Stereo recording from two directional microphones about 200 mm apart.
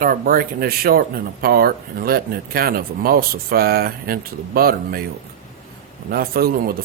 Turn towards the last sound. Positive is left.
turn(degrees=-50)  # may be behind; listen again after turning